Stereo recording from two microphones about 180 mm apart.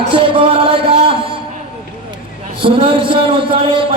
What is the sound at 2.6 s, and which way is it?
A man's voice, 30° right (ahead or behind).